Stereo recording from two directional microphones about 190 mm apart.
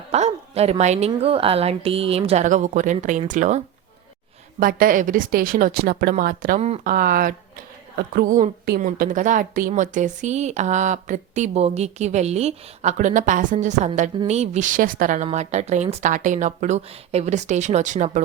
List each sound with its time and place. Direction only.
0.1 s speech: 35° right (ahead or behind)
4.6 s speech: 45° right (ahead or behind)